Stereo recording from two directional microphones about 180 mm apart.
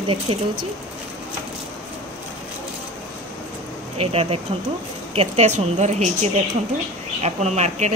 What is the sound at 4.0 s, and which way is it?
Speech, 35° right (ahead or behind).